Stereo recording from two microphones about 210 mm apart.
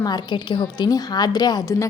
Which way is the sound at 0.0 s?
20° left (ahead or behind).